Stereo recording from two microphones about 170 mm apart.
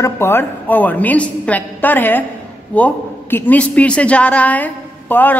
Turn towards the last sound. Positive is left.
turn(degrees=10)  # may be behind; listen again after turning